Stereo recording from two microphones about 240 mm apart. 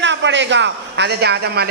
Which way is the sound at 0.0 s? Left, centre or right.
Right.